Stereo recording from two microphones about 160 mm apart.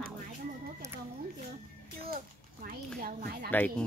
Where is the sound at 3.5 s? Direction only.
10° left (ahead or behind).